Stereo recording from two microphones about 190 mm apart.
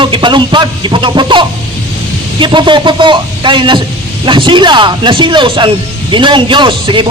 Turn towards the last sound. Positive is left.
turn(degrees=-25)  # may be behind; listen again after turning